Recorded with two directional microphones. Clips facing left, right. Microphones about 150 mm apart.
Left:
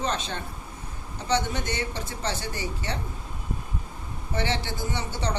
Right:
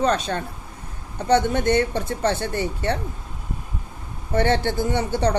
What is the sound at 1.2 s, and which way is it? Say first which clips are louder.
Speech: right 8 dB; 55° right (ahead or behind).